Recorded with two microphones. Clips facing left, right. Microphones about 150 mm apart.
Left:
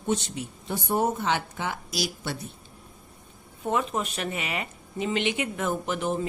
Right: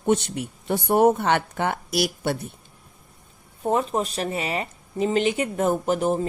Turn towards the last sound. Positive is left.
turn(degrees=-40)  # may be behind; listen again after turning